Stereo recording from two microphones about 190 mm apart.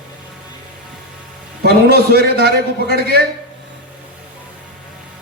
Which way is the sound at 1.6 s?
60° right (ahead or behind).